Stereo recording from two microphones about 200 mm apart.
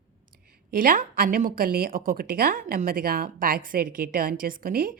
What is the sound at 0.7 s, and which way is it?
Speech, 45° right (ahead or behind).